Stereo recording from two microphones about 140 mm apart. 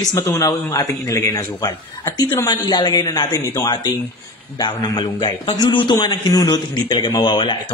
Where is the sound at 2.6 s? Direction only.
30° left (ahead or behind).